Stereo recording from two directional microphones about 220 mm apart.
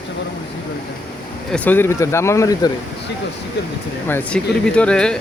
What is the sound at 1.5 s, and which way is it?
Speech, 10° left (ahead or behind).